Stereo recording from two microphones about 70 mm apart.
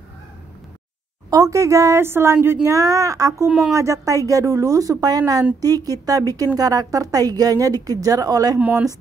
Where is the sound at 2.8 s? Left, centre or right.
Right.